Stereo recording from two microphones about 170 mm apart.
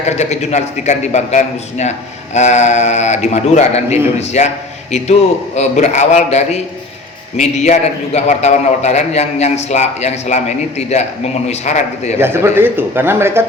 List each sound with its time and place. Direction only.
0.0 s a man's voice: 40° left (ahead or behind)
5.5 s a man's voice: 40° left (ahead or behind)
12.2 s speech: 15° right (ahead or behind)